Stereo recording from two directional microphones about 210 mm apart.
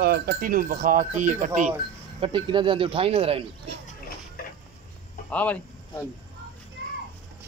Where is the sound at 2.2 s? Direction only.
25° right (ahead or behind).